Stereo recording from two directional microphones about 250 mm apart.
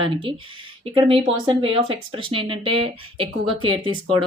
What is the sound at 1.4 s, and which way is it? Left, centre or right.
Speech, right.